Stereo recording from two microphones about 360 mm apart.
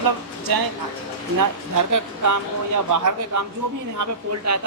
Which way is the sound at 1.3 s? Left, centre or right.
Right.